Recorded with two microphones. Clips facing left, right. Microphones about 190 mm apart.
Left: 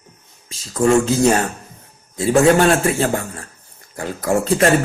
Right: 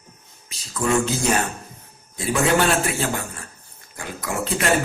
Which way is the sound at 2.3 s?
40° left (ahead or behind).